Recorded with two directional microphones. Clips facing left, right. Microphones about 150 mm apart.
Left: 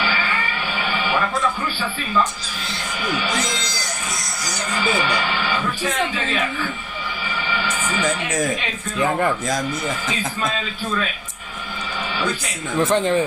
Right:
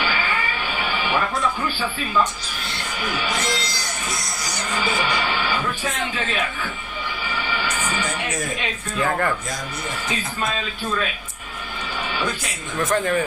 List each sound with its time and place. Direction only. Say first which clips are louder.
9.0 s speech: left 2 dB; 15° left (ahead or behind)
12.8 s speech: left 3 dB; 25° left (ahead or behind)